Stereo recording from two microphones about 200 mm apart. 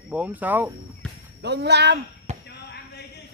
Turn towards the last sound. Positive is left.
turn(degrees=55)  # may be behind; listen again after turning